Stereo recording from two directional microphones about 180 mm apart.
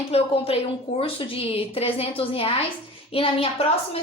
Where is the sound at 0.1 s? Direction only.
30° left (ahead or behind).